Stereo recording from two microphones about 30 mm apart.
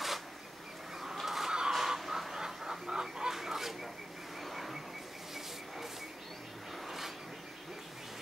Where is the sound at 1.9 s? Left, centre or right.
Centre.